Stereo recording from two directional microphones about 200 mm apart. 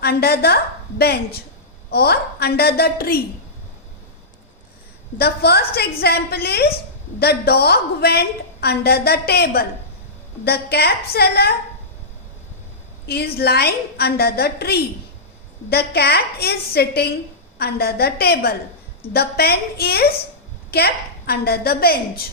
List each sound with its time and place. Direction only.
0.0 s a woman's voice: 50° left (ahead or behind)
5.1 s a woman's voice: 55° left (ahead or behind)
13.1 s a woman's voice: 50° left (ahead or behind)